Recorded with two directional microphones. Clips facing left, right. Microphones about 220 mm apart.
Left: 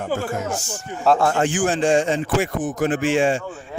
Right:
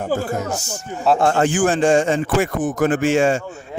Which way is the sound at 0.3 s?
40° right (ahead or behind).